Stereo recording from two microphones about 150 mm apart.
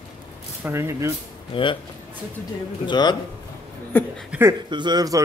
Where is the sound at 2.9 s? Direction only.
30° left (ahead or behind).